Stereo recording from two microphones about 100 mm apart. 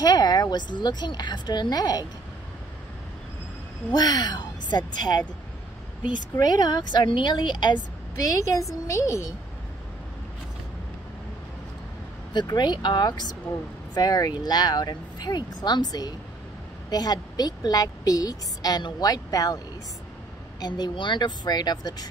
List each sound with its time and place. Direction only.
0.0 s speech: 45° left (ahead or behind)
3.9 s speech: 40° left (ahead or behind)
6.4 s speech: 40° left (ahead or behind)
8.3 s a woman's voice: 35° left (ahead or behind)
12.3 s a woman's voice: 45° left (ahead or behind)
20.6 s speech: 45° left (ahead or behind)